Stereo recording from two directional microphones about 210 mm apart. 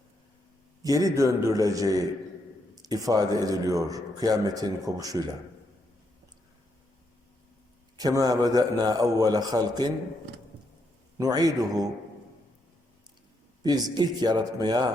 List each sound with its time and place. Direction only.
0.8 s a man's voice: 15° right (ahead or behind)
7.9 s a man's voice: 20° right (ahead or behind)
11.2 s a man's voice: 15° right (ahead or behind)
13.6 s speech: 20° right (ahead or behind)